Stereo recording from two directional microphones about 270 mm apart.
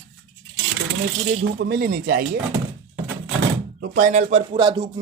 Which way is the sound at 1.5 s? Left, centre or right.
Right.